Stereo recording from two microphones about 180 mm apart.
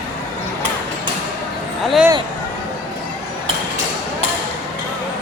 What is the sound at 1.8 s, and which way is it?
Speech, centre (ahead or behind).